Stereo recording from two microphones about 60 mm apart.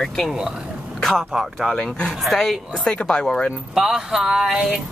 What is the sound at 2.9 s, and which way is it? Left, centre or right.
Speech, centre.